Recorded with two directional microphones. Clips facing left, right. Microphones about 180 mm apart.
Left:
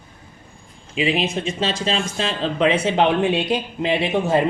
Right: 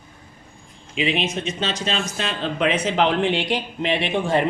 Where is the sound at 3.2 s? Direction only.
25° right (ahead or behind).